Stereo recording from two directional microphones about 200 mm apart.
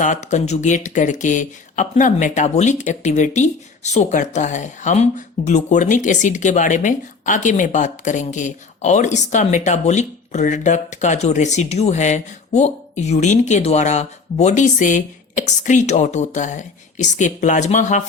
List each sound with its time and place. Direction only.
0.0 s speech: 35° left (ahead or behind)